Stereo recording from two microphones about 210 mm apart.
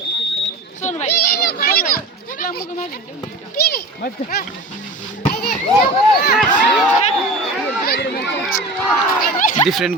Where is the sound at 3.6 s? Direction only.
45° left (ahead or behind).